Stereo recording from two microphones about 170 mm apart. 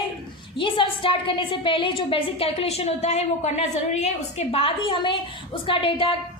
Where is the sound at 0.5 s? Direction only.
30° left (ahead or behind).